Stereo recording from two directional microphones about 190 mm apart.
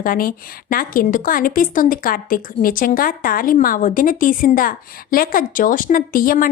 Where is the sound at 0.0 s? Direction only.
50° left (ahead or behind).